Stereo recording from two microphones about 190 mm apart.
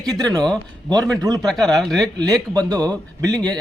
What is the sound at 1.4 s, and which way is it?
Speech, centre (ahead or behind).